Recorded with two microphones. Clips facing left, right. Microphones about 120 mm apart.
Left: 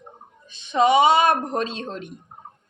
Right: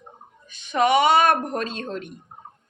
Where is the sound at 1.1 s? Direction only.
60° right (ahead or behind).